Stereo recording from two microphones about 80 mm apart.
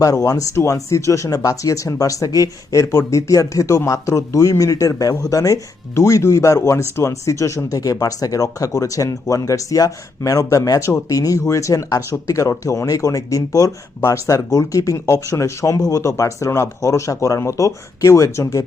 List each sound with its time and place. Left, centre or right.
0.0 s speech: left
2.9 s speech: left